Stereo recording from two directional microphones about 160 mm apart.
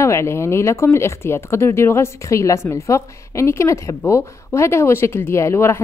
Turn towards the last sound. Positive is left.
turn(degrees=15)  # may be behind; listen again after turning